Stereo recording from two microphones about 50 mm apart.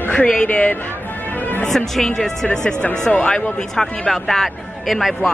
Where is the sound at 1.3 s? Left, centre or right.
Left.